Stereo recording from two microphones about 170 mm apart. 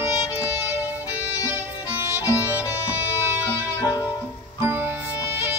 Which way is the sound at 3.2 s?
15° right (ahead or behind).